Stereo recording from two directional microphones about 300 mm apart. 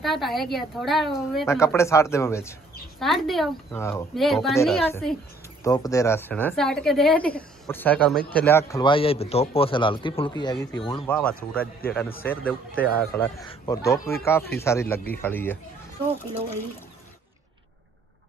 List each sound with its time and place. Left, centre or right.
0.0 s speech: centre
5.6 s a man's voice: centre